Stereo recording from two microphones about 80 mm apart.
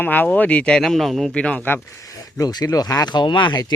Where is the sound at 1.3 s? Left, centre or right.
Centre.